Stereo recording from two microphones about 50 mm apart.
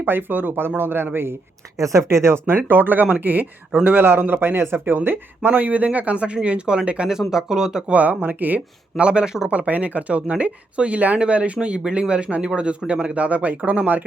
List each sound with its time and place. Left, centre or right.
0.0 s a man's voice: right
1.8 s speech: right
2.6 s a man's voice: right
4.9 s speech: right
7.1 s speech: centre
7.9 s speech: right
9.0 s speech: right
9.5 s speech: right